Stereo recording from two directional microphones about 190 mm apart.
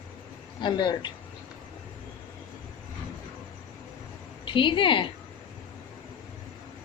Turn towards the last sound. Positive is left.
turn(degrees=25)  # may be behind; listen again after turning